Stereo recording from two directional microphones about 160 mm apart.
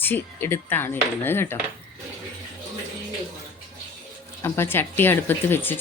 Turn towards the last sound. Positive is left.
turn(degrees=10)  # may be behind; listen again after turning